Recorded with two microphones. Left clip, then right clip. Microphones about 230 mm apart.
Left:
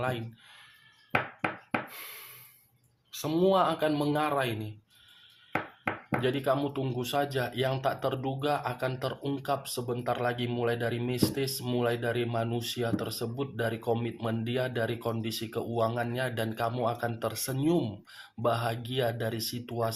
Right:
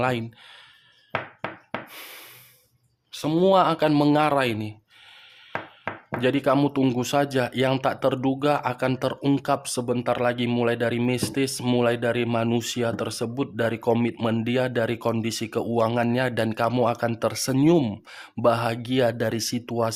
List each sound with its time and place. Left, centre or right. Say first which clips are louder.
0.0 s a man's voice: right 8 dB; right
3.1 s a man's voice: right 6 dB; right
6.2 s speech: right 8 dB; right